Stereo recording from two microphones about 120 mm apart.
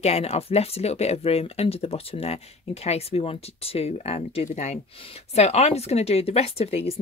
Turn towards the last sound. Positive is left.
turn(degrees=55)  # may be behind; listen again after turning